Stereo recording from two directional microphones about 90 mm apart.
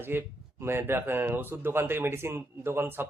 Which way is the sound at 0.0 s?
25° right (ahead or behind).